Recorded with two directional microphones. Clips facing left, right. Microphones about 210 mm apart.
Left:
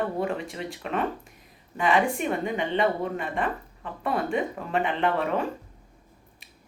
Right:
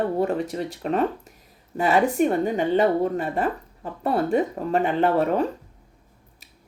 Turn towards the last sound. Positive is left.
turn(degrees=-40)  # may be behind; listen again after turning